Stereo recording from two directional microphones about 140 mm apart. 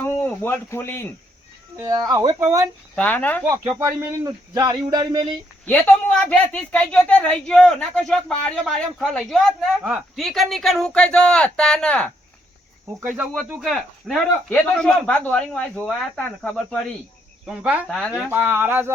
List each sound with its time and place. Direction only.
0.0 s a sound: 15° left (ahead or behind)
1.7 s speech: 25° right (ahead or behind)
2.9 s speech: 10° left (ahead or behind)
3.8 s speech: 20° right (ahead or behind)
5.6 s speech: 10° left (ahead or behind)
13.7 s speech: centre (ahead or behind)
17.4 s speech: 10° right (ahead or behind)